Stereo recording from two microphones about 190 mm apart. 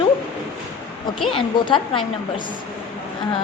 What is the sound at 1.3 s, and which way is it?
Speech, 25° left (ahead or behind).